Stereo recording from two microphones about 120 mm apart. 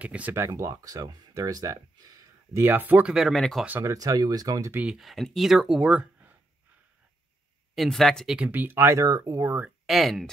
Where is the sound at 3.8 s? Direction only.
30° right (ahead or behind).